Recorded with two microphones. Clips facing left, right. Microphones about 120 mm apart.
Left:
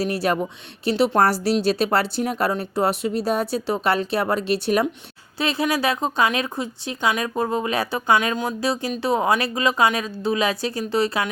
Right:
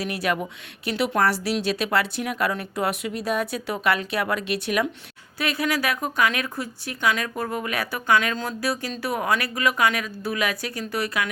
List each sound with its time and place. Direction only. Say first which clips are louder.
0.0 s speech: left 4 dB; 35° left (ahead or behind)